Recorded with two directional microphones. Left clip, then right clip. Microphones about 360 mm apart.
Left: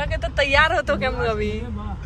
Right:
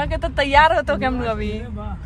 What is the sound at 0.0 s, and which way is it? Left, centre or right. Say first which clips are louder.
A woman's voice: right 1 dB; centre.